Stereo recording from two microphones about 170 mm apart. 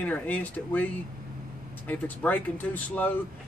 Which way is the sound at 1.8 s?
10° left (ahead or behind).